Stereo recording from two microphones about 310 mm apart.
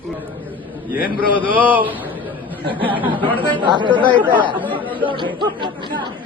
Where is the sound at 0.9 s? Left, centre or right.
Centre.